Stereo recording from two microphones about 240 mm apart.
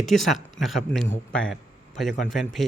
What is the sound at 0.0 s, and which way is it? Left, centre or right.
Speech, centre.